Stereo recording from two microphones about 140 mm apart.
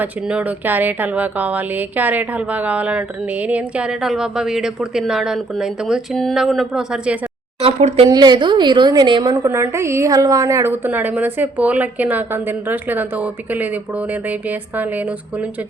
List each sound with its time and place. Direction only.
0.0 s speech: 10° right (ahead or behind)
7.6 s speech: 45° right (ahead or behind)
8.1 s a woman's voice: 30° right (ahead or behind)
9.3 s speech: 20° right (ahead or behind)